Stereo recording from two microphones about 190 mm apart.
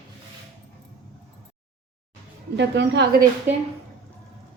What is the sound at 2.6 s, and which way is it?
Speech, 65° right (ahead or behind).